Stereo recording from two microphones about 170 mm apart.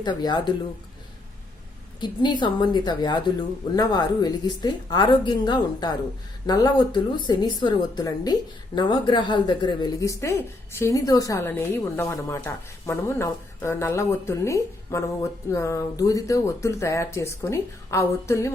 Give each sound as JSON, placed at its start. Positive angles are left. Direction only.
{"t": 0.0, "sound": "a woman's voice", "side_deg": 25}
{"t": 2.0, "sound": "a woman's voice", "side_deg": 25}